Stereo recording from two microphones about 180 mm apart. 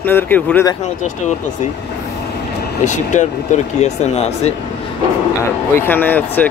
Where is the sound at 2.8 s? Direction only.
40° left (ahead or behind).